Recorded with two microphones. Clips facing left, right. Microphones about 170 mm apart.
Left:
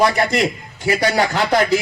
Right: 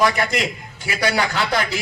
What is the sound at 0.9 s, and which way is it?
Speech, 40° left (ahead or behind).